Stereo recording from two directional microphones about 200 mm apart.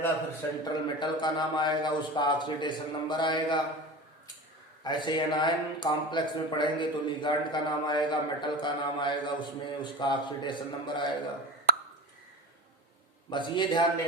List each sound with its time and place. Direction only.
0.6 s a man's voice: 20° left (ahead or behind)
4.8 s a man's voice: 20° left (ahead or behind)
13.3 s a man's voice: 20° left (ahead or behind)